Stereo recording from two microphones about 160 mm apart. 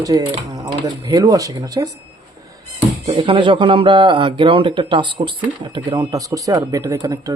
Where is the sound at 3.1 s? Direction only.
35° right (ahead or behind).